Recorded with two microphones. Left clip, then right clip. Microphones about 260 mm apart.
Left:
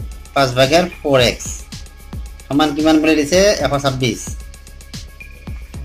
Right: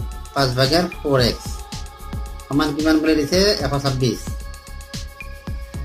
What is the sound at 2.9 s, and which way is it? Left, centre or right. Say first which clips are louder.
Speech: left 3 dB; centre.